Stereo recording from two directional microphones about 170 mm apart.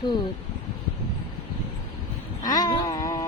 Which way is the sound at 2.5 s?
20° left (ahead or behind).